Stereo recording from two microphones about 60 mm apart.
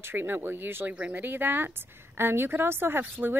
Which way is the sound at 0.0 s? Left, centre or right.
Right.